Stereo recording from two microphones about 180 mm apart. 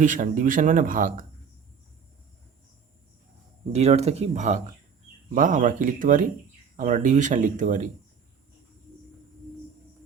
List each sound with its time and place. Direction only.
0.0 s speech: 45° right (ahead or behind)
3.7 s speech: 35° right (ahead or behind)